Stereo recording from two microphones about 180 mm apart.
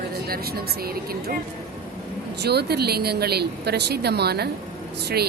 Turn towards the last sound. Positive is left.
turn(degrees=-65)  # may be behind; listen again after turning